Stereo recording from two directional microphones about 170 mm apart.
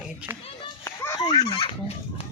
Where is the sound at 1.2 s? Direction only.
20° left (ahead or behind).